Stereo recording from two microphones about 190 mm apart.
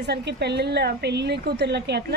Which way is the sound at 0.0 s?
60° right (ahead or behind).